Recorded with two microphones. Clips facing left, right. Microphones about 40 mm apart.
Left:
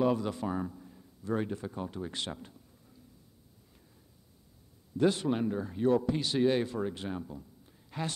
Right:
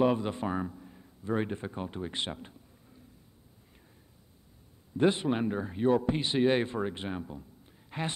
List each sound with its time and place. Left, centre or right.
0.0 s speech: right
0.7 s a sound: centre
0.9 s speech: right
4.9 s speech: right